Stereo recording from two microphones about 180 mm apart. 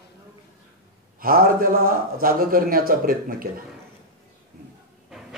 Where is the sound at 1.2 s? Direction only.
55° right (ahead or behind).